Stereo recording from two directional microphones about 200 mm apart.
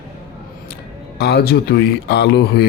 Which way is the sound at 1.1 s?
50° left (ahead or behind).